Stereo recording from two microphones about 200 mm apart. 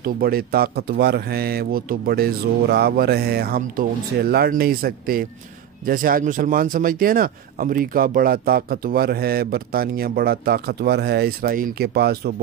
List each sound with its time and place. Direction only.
0.0 s a man's voice: 50° right (ahead or behind)